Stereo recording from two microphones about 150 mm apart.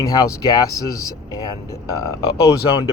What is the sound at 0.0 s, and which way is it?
Speech, 25° left (ahead or behind).